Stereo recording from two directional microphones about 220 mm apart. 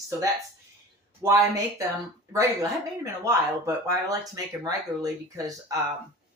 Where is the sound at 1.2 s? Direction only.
15° right (ahead or behind).